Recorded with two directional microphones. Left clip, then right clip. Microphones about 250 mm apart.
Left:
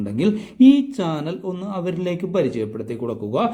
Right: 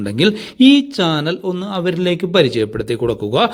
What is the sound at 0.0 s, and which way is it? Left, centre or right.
Speech, centre.